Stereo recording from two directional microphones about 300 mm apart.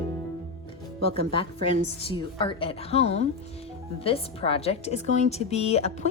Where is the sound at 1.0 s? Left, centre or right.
Centre.